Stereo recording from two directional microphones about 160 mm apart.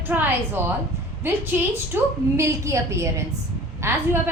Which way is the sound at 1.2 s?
15° right (ahead or behind).